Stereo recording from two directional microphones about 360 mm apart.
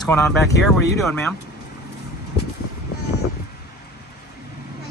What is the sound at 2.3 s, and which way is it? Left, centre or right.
Vehicle, left.